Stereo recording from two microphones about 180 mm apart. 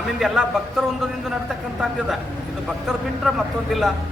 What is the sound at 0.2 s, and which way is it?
Speech, centre (ahead or behind).